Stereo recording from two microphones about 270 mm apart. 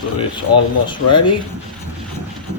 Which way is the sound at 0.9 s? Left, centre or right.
Centre.